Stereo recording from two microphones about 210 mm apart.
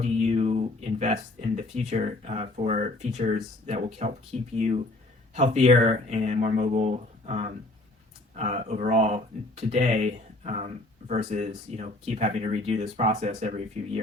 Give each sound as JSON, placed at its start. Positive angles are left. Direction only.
{"t": 0.0, "sound": "speech", "side_deg": -30}